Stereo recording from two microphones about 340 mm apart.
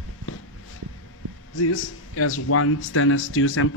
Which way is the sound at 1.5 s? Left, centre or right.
Left.